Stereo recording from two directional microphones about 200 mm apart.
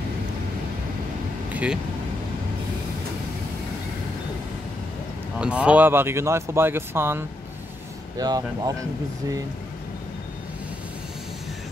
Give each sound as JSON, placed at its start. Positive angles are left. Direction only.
{"t": 1.5, "sound": "vehicle", "side_deg": -5}
{"t": 5.4, "sound": "speech", "side_deg": -5}